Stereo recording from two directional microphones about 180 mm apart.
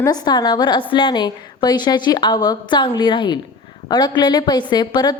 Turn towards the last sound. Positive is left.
turn(degrees=25)  # may be behind; listen again after turning